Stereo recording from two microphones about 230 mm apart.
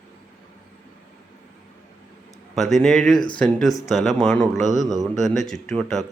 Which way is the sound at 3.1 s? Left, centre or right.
Left.